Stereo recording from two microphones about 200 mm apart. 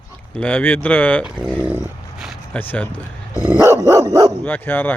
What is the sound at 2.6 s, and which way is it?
Speech, 10° left (ahead or behind).